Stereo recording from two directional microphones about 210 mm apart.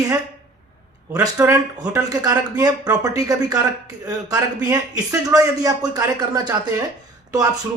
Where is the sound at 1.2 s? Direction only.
15° right (ahead or behind).